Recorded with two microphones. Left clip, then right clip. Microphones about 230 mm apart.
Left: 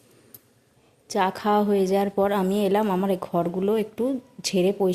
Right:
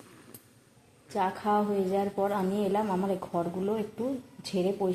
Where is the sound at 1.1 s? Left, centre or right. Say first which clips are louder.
Left 6 dB; left.